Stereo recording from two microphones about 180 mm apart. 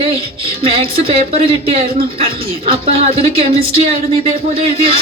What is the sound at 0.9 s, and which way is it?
Speech, 30° right (ahead or behind).